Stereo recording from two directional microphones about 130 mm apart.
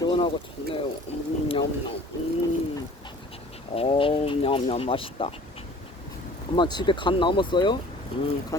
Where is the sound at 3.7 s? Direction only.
45° left (ahead or behind).